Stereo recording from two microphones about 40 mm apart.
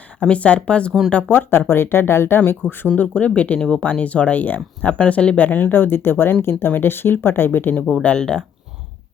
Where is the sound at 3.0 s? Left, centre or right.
Left.